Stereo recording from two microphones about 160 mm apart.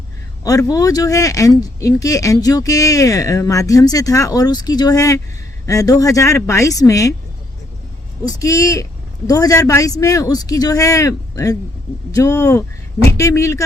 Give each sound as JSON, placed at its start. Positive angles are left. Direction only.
{"t": 0.4, "sound": "speech", "side_deg": 20}
{"t": 8.4, "sound": "speech", "side_deg": 20}